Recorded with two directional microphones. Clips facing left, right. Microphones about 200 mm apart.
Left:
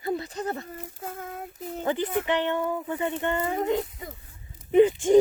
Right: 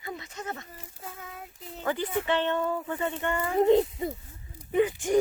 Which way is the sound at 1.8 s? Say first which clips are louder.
Left 2 dB; 20° left (ahead or behind).